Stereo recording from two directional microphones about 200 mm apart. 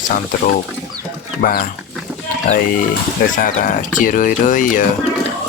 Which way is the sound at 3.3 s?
40° left (ahead or behind).